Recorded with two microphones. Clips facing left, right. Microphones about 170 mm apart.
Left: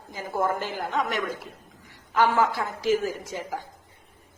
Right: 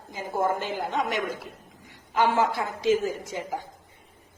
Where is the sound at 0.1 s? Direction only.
20° right (ahead or behind).